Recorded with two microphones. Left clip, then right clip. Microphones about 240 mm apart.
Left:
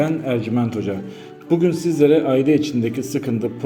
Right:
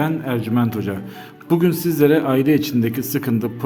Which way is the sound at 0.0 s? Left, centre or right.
Centre.